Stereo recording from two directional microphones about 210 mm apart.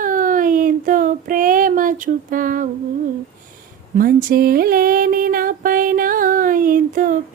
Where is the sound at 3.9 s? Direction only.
40° right (ahead or behind).